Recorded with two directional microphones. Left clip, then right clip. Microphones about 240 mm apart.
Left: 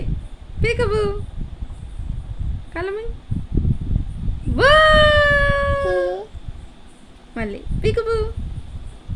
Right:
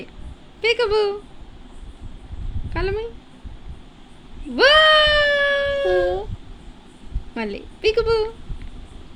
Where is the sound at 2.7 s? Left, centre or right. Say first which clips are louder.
Right 1 dB; centre.